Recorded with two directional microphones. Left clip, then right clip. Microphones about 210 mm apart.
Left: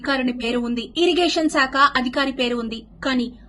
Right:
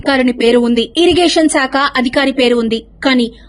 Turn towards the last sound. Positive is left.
turn(degrees=-40)  # may be behind; listen again after turning